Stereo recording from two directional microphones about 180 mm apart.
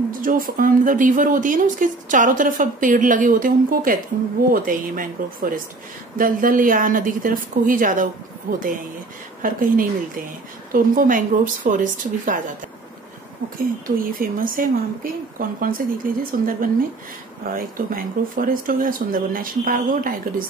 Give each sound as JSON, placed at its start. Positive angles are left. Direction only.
{"t": 0.2, "sound": "speech", "side_deg": -50}
{"t": 13.8, "sound": "speech", "side_deg": -50}